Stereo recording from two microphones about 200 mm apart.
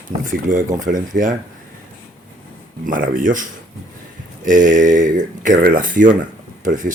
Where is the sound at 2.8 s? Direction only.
45° right (ahead or behind).